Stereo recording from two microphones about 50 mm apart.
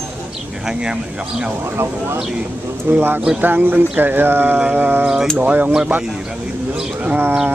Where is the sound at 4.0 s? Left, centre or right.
Right.